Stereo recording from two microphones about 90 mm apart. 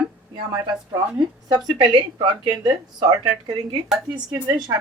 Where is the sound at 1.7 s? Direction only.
55° right (ahead or behind).